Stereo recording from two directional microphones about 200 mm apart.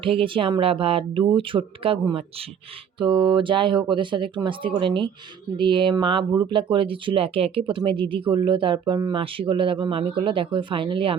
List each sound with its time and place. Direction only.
0.0 s speech: 25° right (ahead or behind)